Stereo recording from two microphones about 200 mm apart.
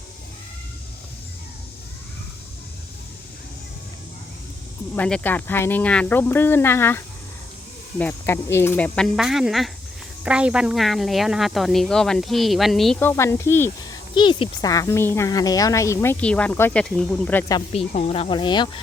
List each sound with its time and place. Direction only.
4.9 s a woman's voice: 5° left (ahead or behind)
17.7 s speech: 30° left (ahead or behind)